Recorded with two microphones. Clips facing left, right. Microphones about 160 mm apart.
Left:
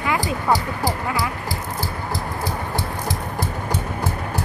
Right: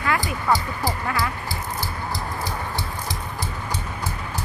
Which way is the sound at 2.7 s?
50° left (ahead or behind).